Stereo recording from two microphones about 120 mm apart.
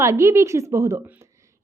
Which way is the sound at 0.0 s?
25° right (ahead or behind).